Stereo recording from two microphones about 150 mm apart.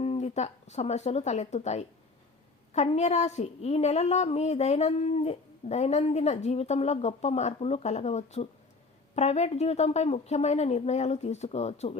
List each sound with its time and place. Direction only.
0.0 s a woman's voice: 45° left (ahead or behind)